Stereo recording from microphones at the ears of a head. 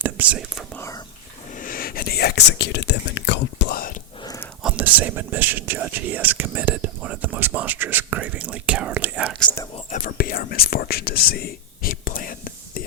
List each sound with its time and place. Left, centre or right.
0.0 s speech: right
1.6 s whispering: left
4.6 s speech: right
9.9 s whispering: left